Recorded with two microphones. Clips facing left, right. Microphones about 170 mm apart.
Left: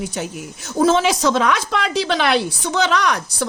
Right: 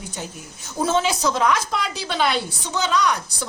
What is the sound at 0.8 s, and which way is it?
A woman's voice, 90° left.